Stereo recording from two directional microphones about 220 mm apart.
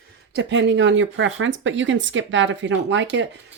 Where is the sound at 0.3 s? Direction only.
50° right (ahead or behind).